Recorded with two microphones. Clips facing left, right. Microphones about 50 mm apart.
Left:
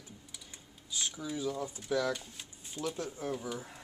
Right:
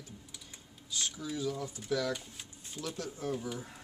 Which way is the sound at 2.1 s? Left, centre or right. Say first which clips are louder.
Left 1 dB; centre.